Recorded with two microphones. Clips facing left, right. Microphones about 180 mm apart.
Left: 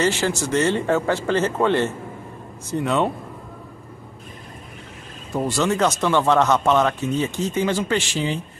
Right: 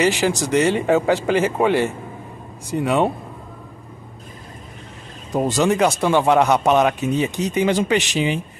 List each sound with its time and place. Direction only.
0.0 s speech: 15° right (ahead or behind)
5.3 s speech: 20° right (ahead or behind)